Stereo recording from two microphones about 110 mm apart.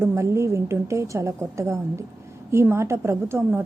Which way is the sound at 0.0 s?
25° right (ahead or behind).